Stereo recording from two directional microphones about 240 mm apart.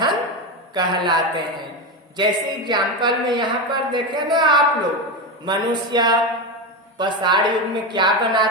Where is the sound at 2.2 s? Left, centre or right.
Centre.